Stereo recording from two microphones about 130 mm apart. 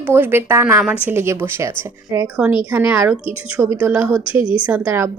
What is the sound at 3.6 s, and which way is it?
Speech, 5° right (ahead or behind).